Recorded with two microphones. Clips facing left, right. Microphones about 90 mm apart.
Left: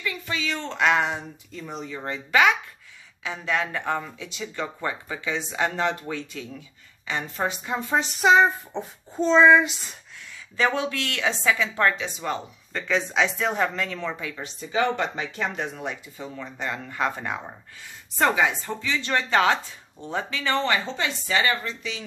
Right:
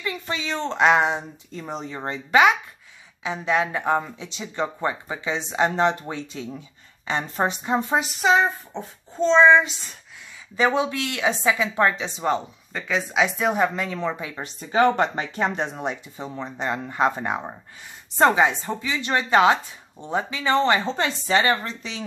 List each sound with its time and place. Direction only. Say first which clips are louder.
0.0 s speech: right 1 dB; 25° right (ahead or behind)
1.6 s speech: right 3 dB; 35° right (ahead or behind)
8.0 s child singing: left 6 dB; centre (ahead or behind)
10.6 s speech: right 3 dB; 20° right (ahead or behind)
12.7 s speech: right 1 dB; 5° right (ahead or behind)
14.3 s speech: right 4 dB; 45° right (ahead or behind)